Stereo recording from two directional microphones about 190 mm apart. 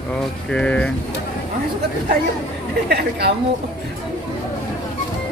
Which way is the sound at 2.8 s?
60° right (ahead or behind).